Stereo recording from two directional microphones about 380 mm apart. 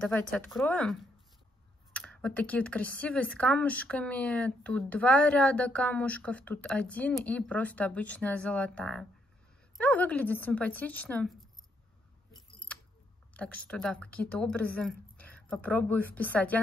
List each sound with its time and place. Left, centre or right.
0.0 s speech: centre
13.3 s speech: centre